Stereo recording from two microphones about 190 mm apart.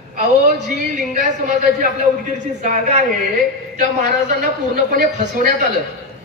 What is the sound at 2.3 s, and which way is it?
A woman's voice, 40° right (ahead or behind).